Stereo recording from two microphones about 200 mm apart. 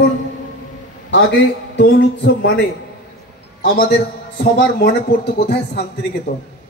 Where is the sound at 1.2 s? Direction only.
60° left (ahead or behind).